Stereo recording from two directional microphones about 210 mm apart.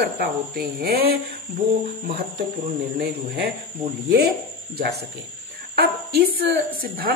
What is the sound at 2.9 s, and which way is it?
Speech, 45° right (ahead or behind).